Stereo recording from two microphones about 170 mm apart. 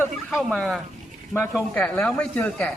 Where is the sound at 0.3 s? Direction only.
Centre (ahead or behind).